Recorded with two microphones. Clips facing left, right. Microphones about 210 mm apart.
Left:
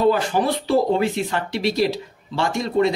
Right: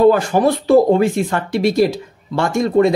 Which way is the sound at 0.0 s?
50° right (ahead or behind).